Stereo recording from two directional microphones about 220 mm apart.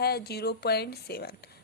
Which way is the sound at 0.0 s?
45° left (ahead or behind).